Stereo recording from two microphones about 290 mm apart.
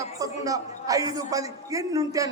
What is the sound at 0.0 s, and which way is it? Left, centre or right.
Speech, centre.